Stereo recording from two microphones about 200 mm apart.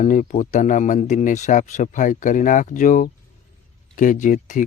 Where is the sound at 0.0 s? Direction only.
40° left (ahead or behind).